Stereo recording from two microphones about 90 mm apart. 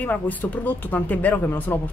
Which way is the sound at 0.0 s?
20° left (ahead or behind).